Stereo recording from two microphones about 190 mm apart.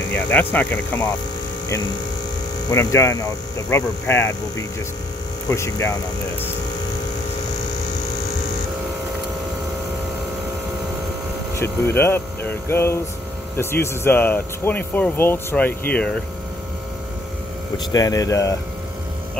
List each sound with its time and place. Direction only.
0.1 s speech: 10° left (ahead or behind)
2.7 s speech: 15° left (ahead or behind)
11.5 s speech: 15° left (ahead or behind)
17.9 s speech: 20° left (ahead or behind)